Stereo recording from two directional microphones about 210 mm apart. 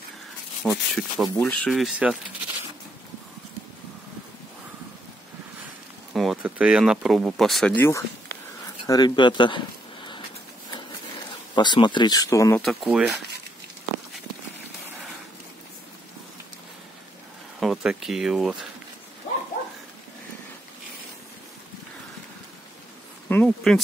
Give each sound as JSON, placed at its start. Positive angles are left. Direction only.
{"t": 0.7, "sound": "speech", "side_deg": 0}
{"t": 6.1, "sound": "speech", "side_deg": -5}
{"t": 8.8, "sound": "a sound", "side_deg": 20}
{"t": 11.5, "sound": "speech", "side_deg": 20}
{"t": 12.6, "sound": "speech", "side_deg": 0}
{"t": 17.6, "sound": "speech", "side_deg": 0}
{"t": 23.2, "sound": "speech", "side_deg": 5}